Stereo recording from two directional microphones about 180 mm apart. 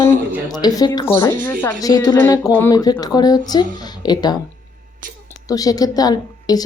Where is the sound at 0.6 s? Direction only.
20° left (ahead or behind).